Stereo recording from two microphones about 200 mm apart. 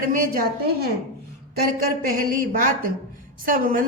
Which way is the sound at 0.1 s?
45° right (ahead or behind).